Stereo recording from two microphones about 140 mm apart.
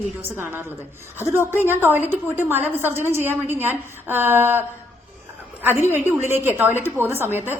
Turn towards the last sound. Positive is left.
turn(degrees=-15)  # may be behind; listen again after turning